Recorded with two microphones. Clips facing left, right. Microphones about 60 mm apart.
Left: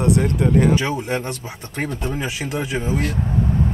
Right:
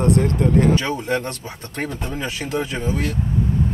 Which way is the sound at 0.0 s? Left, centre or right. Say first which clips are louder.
Even; centre.